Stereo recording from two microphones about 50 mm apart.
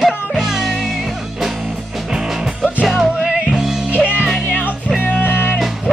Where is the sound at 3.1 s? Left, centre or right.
Right.